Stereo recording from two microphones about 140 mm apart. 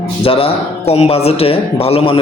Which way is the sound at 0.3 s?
40° left (ahead or behind).